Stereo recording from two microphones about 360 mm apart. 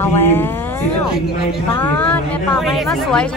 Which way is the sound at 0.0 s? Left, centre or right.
Centre.